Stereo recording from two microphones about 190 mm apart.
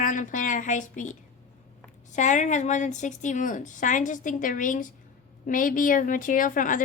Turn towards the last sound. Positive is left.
turn(degrees=45)  # may be behind; listen again after turning